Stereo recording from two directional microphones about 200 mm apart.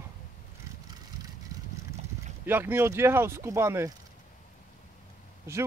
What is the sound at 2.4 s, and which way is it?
Speech, 10° right (ahead or behind).